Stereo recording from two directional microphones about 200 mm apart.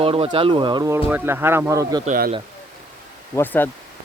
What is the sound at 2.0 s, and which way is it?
Speech, 40° right (ahead or behind).